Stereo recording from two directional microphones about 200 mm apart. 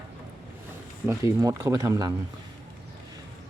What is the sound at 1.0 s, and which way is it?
Speech, 15° right (ahead or behind).